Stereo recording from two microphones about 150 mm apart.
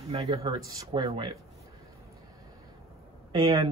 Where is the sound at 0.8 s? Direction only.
25° right (ahead or behind).